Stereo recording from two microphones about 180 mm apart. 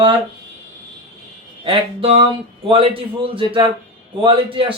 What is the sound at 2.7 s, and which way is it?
A man's voice, 30° right (ahead or behind).